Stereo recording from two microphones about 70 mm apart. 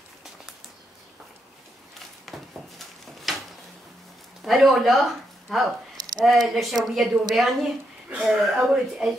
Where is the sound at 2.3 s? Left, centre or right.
Centre.